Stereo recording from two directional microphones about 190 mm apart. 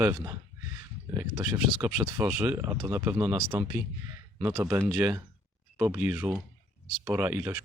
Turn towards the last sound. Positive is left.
turn(degrees=-10)  # may be behind; listen again after turning